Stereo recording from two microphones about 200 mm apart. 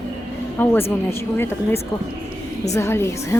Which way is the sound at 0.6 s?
10° left (ahead or behind).